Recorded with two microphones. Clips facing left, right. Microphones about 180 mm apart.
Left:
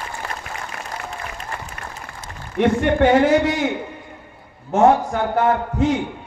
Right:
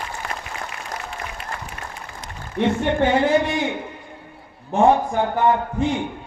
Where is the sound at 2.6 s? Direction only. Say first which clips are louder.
Left 3 dB; 80° left.